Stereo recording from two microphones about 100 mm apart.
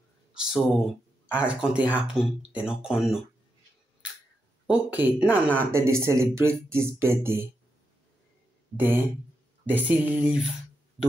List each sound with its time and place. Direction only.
0.3 s a sound: 5° right (ahead or behind)
1.3 s speech: 10° right (ahead or behind)
4.6 s speech: 15° right (ahead or behind)
5.7 s speech: 30° right (ahead or behind)
8.7 s speech: 20° right (ahead or behind)